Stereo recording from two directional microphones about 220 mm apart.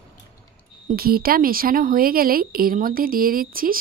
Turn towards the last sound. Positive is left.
turn(degrees=-40)  # may be behind; listen again after turning